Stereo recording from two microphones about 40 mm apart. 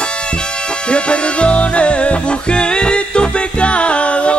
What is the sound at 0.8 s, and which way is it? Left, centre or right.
Music, left.